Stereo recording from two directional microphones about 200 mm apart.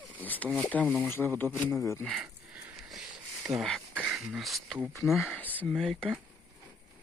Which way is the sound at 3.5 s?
Centre (ahead or behind).